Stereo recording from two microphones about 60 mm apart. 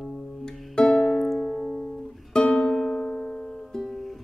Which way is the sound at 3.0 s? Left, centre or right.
Left.